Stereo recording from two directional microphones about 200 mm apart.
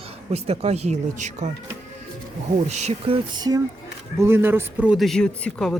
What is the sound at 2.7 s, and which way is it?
A man's voice, 35° right (ahead or behind).